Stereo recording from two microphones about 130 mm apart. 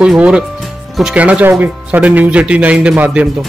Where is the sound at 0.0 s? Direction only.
10° right (ahead or behind).